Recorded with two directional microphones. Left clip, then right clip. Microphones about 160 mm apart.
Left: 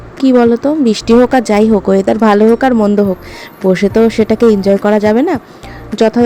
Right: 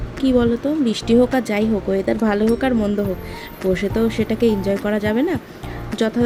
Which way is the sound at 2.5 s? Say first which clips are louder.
Left 9 dB; 35° left (ahead or behind).